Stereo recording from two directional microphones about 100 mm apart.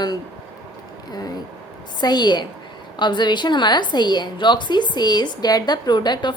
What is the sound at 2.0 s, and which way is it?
A woman's voice, 45° left (ahead or behind).